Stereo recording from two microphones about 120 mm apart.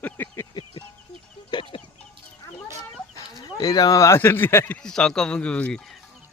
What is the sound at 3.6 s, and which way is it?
Speech, 30° left (ahead or behind).